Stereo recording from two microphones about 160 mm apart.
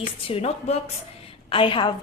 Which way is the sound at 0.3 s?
40° left (ahead or behind).